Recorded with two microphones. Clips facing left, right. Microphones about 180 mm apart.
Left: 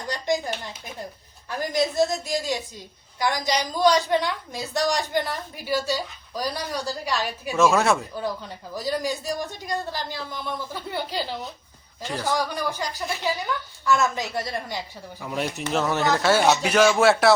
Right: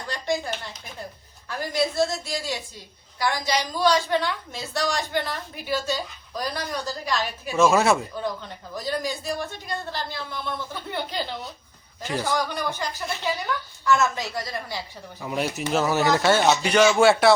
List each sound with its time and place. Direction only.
0.1 s a woman's voice: 15° left (ahead or behind)
7.5 s a man's voice: centre (ahead or behind)
8.7 s a woman's voice: 10° left (ahead or behind)
14.3 s a woman's voice: 25° left (ahead or behind)
15.2 s a man's voice: centre (ahead or behind)
16.2 s a man's voice: 5° left (ahead or behind)